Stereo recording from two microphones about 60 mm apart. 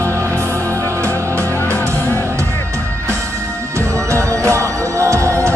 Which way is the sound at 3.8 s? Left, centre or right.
Right.